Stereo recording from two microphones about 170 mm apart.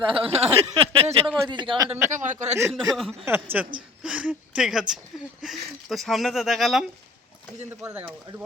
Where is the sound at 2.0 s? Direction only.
45° right (ahead or behind).